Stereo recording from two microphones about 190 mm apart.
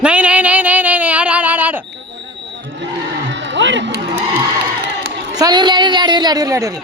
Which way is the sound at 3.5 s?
75° right (ahead or behind).